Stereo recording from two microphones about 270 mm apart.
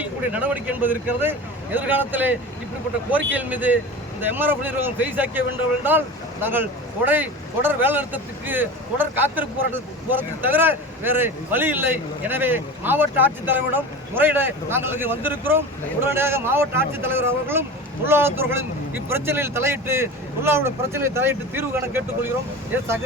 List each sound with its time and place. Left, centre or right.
0.0 s speech: centre